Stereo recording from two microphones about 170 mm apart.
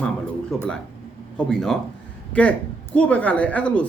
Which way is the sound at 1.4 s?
5° left (ahead or behind).